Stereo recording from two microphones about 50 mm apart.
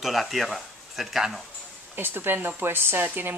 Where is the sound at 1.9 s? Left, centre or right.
Right.